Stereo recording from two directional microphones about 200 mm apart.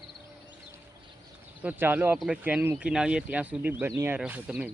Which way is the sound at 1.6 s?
10° right (ahead or behind).